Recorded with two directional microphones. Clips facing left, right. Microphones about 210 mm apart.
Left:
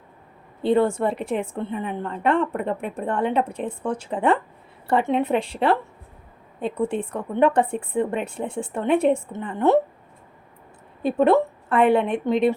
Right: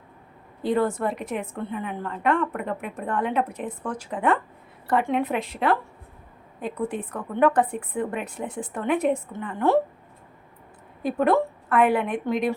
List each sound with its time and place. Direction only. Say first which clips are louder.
0.6 s a woman's voice: left 4 dB; 25° left (ahead or behind)
11.0 s a woman's voice: left 3 dB; 25° left (ahead or behind)